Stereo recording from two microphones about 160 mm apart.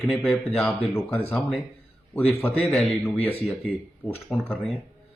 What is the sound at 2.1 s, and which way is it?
Speech, 10° left (ahead or behind).